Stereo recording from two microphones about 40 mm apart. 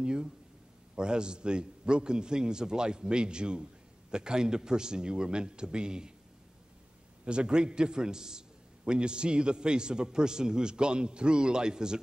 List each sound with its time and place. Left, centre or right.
0.0 s a man's voice: centre
7.2 s a man's voice: right